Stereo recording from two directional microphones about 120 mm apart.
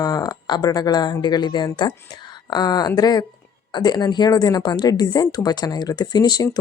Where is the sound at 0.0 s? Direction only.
35° left (ahead or behind).